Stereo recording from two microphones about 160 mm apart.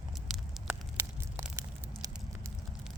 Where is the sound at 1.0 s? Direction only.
20° right (ahead or behind).